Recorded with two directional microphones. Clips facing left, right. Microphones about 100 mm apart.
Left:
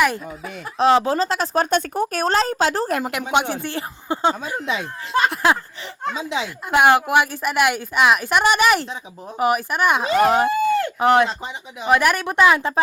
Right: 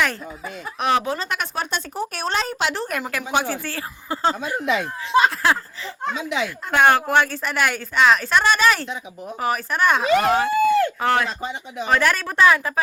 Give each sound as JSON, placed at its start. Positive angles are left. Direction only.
{"t": 0.8, "sound": "speech", "side_deg": 30}
{"t": 1.7, "sound": "speech", "side_deg": 45}
{"t": 3.3, "sound": "speech", "side_deg": 20}
{"t": 6.7, "sound": "a woman's voice", "side_deg": 15}
{"t": 10.0, "sound": "speech", "side_deg": 25}